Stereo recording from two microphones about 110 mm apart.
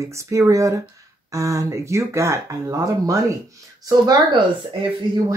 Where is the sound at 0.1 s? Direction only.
25° right (ahead or behind).